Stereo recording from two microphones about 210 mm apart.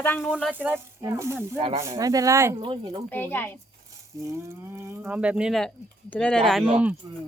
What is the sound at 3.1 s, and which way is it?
Speech, 10° left (ahead or behind).